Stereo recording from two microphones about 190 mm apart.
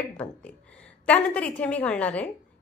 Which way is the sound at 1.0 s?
5° left (ahead or behind).